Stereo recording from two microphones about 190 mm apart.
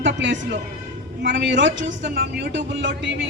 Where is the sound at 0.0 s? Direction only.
70° right (ahead or behind).